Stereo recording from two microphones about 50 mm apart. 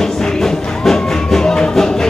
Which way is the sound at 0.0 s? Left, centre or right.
Centre.